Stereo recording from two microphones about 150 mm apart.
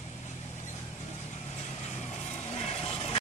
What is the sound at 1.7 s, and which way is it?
Vehicle, 45° left (ahead or behind).